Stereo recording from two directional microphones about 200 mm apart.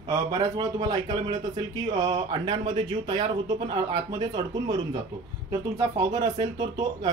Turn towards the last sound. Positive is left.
turn(degrees=-20)  # may be behind; listen again after turning